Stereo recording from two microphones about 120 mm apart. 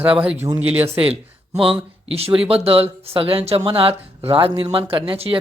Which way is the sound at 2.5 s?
55° right (ahead or behind).